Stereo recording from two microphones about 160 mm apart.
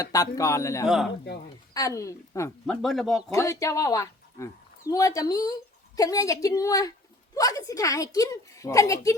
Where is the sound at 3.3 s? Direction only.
20° left (ahead or behind).